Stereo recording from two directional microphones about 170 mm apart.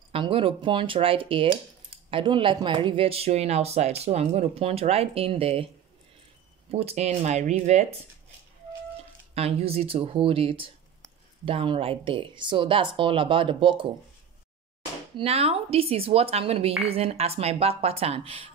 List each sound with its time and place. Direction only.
0.1 s speech: 30° right (ahead or behind)
6.7 s speech: 35° right (ahead or behind)
9.3 s speech: 35° right (ahead or behind)
15.1 s speech: 35° right (ahead or behind)